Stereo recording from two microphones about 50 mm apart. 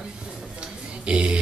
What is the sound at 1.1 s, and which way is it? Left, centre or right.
Speech, right.